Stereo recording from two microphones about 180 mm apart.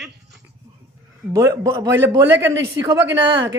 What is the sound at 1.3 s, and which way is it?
A woman's voice, 15° right (ahead or behind).